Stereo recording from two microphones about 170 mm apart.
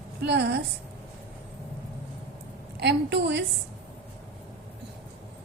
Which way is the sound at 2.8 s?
90° right.